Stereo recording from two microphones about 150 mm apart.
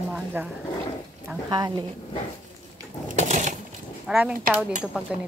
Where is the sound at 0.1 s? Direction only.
10° right (ahead or behind).